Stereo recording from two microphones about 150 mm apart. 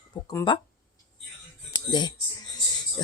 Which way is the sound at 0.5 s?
35° left (ahead or behind).